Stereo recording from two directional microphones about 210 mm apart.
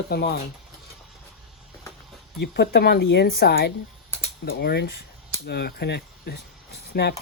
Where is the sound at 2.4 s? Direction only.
50° left (ahead or behind).